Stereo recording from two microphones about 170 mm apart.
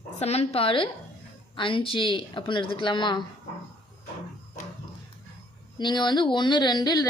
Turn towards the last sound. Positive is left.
turn(degrees=25)  # may be behind; listen again after turning